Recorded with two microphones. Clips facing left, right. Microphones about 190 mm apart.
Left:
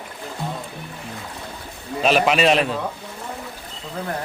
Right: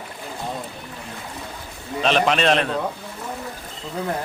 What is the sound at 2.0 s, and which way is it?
Speech, 5° left (ahead or behind).